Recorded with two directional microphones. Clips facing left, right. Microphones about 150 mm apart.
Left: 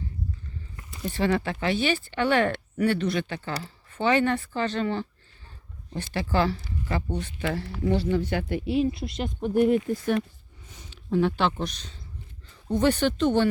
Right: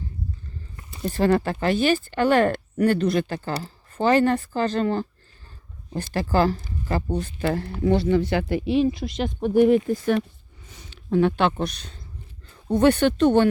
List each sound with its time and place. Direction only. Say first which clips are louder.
1.0 s speech: right 5 dB; 40° right (ahead or behind)
7.8 s speech: right 5 dB; 65° right (ahead or behind)